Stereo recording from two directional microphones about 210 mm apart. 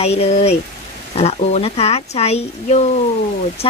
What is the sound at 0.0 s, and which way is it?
Speech, 30° left (ahead or behind).